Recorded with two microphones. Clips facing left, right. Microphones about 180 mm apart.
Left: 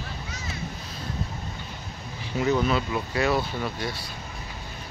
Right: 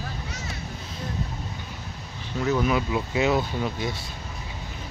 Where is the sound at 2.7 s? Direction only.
15° right (ahead or behind).